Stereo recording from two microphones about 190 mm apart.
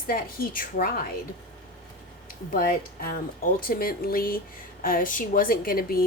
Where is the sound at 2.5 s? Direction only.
50° left (ahead or behind).